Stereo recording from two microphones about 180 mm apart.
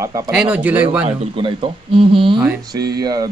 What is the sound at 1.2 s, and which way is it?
Speech, 30° right (ahead or behind).